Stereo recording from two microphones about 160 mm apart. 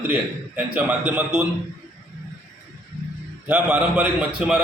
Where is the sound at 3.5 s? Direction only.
10° right (ahead or behind).